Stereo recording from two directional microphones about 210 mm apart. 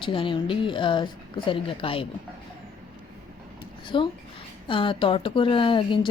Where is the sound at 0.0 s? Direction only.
25° left (ahead or behind).